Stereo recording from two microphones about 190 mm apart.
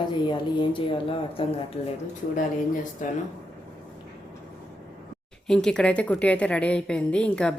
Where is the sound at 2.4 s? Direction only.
40° left (ahead or behind).